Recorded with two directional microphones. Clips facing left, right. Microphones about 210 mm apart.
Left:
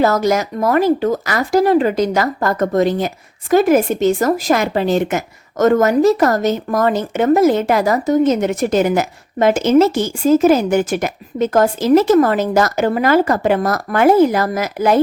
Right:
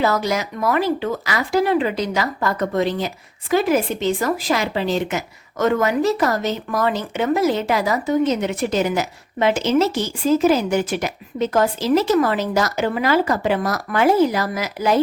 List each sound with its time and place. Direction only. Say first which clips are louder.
0.0 s a woman's voice: left 5 dB; 45° left (ahead or behind)